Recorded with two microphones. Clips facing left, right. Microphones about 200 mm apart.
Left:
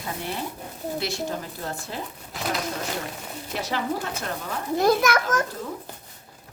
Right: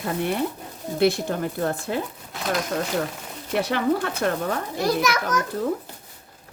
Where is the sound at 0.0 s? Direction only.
60° right (ahead or behind).